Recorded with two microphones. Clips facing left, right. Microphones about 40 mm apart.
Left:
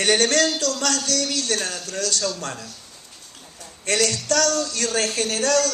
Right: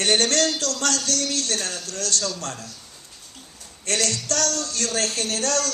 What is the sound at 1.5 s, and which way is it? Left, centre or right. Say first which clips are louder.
Speech: left 2 dB; left.